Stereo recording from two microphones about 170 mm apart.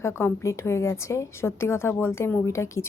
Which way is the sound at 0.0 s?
15° left (ahead or behind).